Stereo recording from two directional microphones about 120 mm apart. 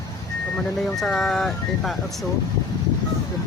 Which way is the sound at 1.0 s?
5° left (ahead or behind).